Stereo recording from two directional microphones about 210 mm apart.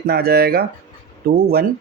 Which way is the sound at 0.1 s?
45° right (ahead or behind).